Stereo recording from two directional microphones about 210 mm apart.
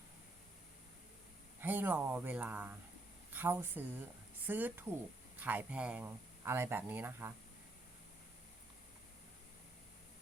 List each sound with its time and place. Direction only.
1.6 s speech: 10° right (ahead or behind)